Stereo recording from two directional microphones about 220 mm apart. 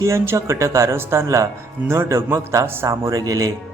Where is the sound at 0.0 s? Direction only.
10° right (ahead or behind).